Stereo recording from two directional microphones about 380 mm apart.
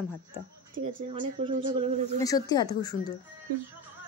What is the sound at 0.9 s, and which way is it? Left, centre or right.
Speech, centre.